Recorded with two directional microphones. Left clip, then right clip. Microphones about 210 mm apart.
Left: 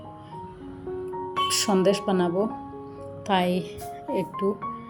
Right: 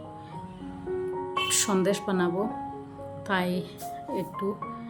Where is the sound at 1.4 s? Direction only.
10° left (ahead or behind).